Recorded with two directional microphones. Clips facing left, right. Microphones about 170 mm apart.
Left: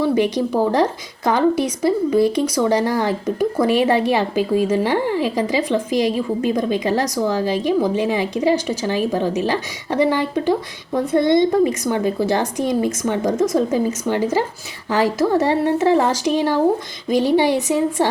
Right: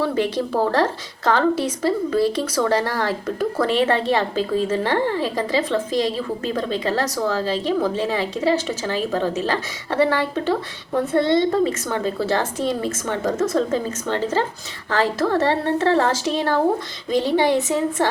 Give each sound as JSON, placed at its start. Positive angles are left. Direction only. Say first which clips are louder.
{"t": 0.0, "sound": "a woman's voice", "louder": "left 4 dB", "side_deg": 15}